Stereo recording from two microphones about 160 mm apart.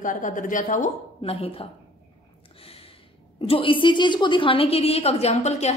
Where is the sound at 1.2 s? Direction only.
35° left (ahead or behind).